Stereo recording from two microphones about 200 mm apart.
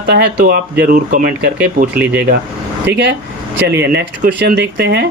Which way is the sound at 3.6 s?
55° right (ahead or behind).